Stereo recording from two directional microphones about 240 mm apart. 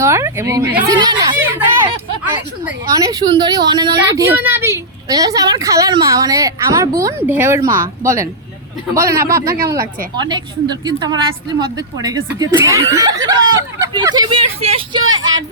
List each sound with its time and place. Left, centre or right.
0.0 s speech: centre
9.3 s speech: centre